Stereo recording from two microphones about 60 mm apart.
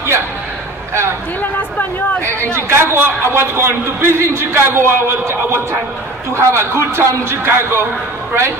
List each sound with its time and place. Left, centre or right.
1.4 s chatter: left
2.2 s a man's voice: right